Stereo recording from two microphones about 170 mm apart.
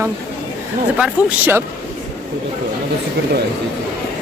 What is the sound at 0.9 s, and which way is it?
Speech, 10° right (ahead or behind).